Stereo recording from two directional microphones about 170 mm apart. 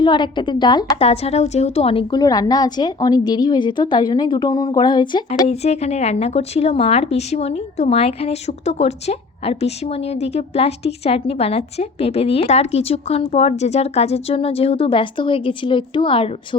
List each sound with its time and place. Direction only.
0.0 s a woman's voice: 25° left (ahead or behind)
5.5 s a woman's voice: 40° left (ahead or behind)